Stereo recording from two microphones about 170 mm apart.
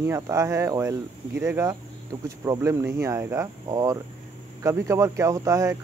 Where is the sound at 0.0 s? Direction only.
15° right (ahead or behind).